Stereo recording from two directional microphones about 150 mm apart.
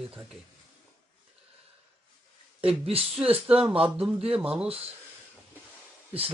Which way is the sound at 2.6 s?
40° right (ahead or behind).